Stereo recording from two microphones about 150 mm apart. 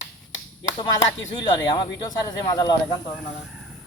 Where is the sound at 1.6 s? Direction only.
25° left (ahead or behind).